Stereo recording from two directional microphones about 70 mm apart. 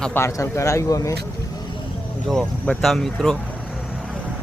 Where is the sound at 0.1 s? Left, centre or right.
Left.